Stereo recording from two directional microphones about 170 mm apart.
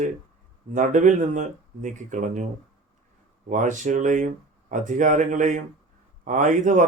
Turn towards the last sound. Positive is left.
turn(degrees=-45)  # may be behind; listen again after turning